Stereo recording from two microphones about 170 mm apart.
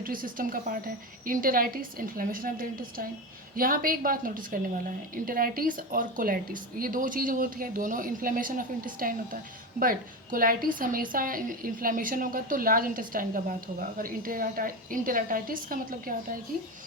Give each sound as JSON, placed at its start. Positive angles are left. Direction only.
{"t": 0.0, "sound": "a woman's voice", "side_deg": -55}